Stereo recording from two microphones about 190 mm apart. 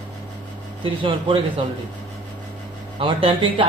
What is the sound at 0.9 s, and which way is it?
Speech, 25° right (ahead or behind).